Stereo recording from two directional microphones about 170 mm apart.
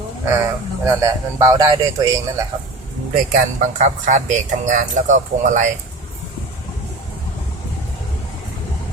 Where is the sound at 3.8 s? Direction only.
50° right (ahead or behind).